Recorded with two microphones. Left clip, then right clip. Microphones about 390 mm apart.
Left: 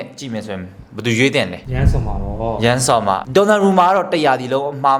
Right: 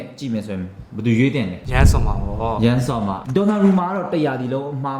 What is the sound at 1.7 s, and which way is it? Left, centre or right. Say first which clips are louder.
Speech: right 4 dB; right.